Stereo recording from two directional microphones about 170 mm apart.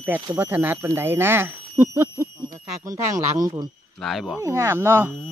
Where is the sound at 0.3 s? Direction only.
15° right (ahead or behind).